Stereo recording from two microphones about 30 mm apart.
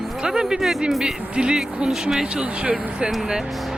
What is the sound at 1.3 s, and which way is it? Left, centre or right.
Speech, right.